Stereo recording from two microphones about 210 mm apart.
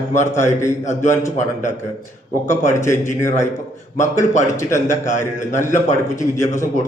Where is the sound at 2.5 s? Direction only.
15° left (ahead or behind).